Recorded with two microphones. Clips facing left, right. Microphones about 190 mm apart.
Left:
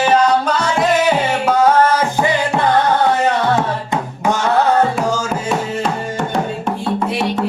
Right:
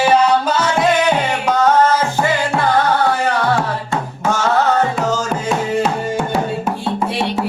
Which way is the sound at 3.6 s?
15° left (ahead or behind).